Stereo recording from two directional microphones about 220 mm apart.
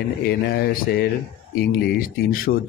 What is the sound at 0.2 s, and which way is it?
A man's voice, 45° left (ahead or behind).